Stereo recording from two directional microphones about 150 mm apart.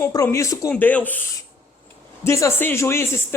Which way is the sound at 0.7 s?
10° left (ahead or behind).